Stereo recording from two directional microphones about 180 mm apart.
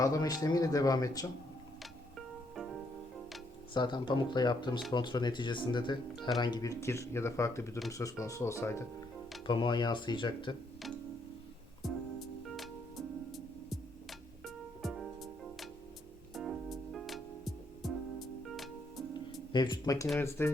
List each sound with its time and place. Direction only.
0.0 s speech: 20° left (ahead or behind)
1.8 s music: centre (ahead or behind)
3.8 s speech: 25° left (ahead or behind)
9.5 s speech: 25° left (ahead or behind)
11.8 s music: centre (ahead or behind)
19.5 s speech: 25° left (ahead or behind)